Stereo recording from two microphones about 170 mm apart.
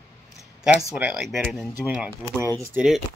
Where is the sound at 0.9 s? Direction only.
5° right (ahead or behind).